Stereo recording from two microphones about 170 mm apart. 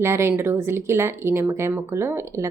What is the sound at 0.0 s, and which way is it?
A woman's voice, 15° right (ahead or behind).